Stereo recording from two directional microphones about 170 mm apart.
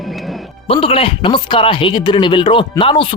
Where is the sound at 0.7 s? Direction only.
35° left (ahead or behind).